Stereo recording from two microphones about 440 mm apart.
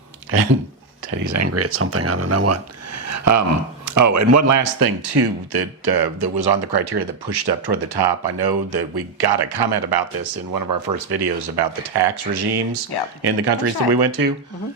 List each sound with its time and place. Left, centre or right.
0.3 s speech: right
1.1 s speech: right